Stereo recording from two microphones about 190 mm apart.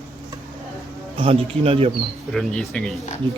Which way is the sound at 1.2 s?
30° right (ahead or behind).